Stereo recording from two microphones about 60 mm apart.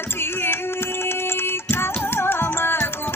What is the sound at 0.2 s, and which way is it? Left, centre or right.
Music, left.